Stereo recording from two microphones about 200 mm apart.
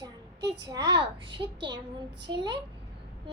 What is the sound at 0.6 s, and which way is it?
Speech, 20° right (ahead or behind).